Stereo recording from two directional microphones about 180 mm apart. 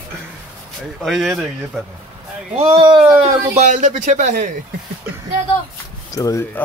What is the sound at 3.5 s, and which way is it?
Speech, 45° right (ahead or behind).